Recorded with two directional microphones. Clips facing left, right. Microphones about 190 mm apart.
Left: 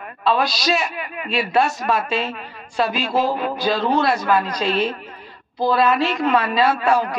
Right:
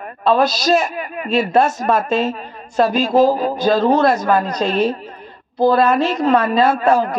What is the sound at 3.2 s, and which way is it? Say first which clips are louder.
A man's voice: right 7 dB; 40° right (ahead or behind).